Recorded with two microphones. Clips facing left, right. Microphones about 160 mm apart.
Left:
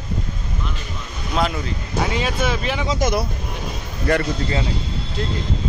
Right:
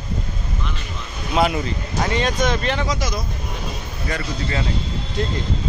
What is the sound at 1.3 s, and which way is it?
Speech, 10° right (ahead or behind).